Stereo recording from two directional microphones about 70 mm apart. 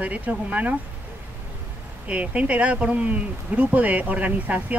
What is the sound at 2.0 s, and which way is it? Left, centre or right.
Speech, centre.